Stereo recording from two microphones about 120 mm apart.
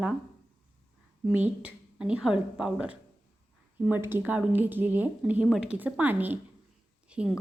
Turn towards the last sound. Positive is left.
turn(degrees=-10)  # may be behind; listen again after turning